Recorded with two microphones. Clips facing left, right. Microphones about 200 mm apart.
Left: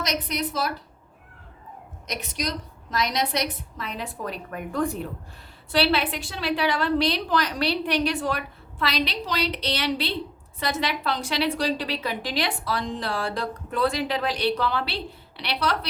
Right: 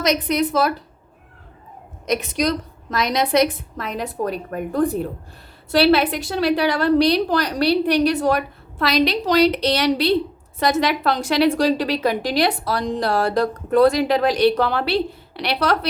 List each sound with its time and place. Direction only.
0.0 s a woman's voice: 55° right (ahead or behind)
2.9 s a woman's voice: 60° right (ahead or behind)